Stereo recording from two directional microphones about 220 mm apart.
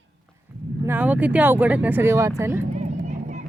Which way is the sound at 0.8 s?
5° right (ahead or behind).